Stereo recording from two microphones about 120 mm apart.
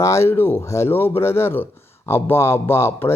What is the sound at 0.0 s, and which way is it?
Speech, 25° left (ahead or behind).